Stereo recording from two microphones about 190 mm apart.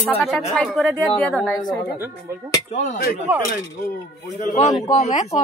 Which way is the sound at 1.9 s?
10° right (ahead or behind).